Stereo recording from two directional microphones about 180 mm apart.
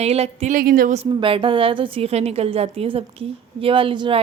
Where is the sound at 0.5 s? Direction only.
55° right (ahead or behind).